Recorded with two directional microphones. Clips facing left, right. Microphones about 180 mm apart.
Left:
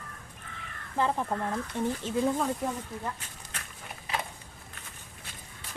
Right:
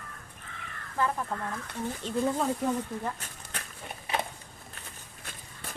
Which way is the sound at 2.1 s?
5° left (ahead or behind).